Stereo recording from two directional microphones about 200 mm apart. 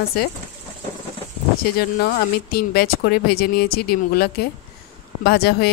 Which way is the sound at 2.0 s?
50° left (ahead or behind).